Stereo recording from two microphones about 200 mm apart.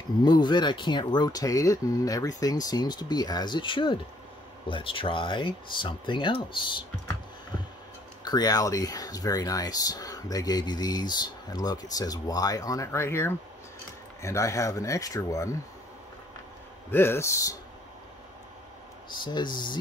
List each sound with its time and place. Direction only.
0.2 s speech: 20° left (ahead or behind)
8.2 s speech: 20° left (ahead or behind)
16.9 s speech: 10° left (ahead or behind)
19.2 s speech: 20° left (ahead or behind)